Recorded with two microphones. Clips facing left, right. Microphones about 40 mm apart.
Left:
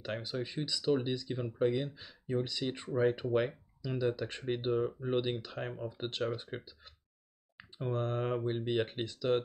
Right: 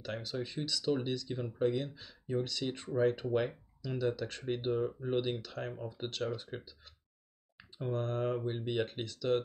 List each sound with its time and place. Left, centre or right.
0.0 s speech: left
8.5 s speech: centre